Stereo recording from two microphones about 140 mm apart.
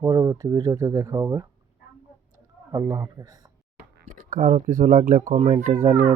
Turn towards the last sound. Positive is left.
turn(degrees=-50)  # may be behind; listen again after turning